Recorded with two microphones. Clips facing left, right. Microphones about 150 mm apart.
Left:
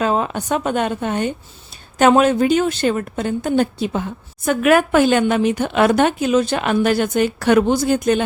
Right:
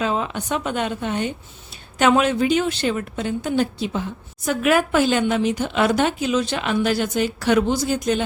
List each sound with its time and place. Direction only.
0.0 s a woman's voice: 45° left (ahead or behind)